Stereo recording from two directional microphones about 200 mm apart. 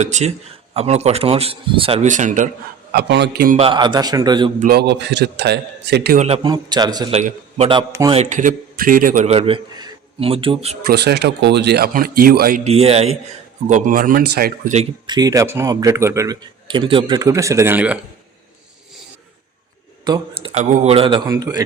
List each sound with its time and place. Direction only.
0.0 s a man's voice: 35° right (ahead or behind)
2.9 s a man's voice: 55° right (ahead or behind)
3.6 s a man's voice: 25° right (ahead or behind)
4.6 s a man's voice: 50° right (ahead or behind)
6.1 s a man's voice: 30° right (ahead or behind)
7.1 s a man's voice: 35° right (ahead or behind)
7.7 s a man's voice: 20° right (ahead or behind)
8.1 s a man's voice: 35° right (ahead or behind)
10.8 s speech: 55° right (ahead or behind)
12.6 s a man's voice: 30° right (ahead or behind)
15.0 s a man's voice: 20° right (ahead or behind)
20.1 s a sound: 20° right (ahead or behind)
20.5 s a man's voice: 35° right (ahead or behind); by 21.6 s 20° right (ahead or behind)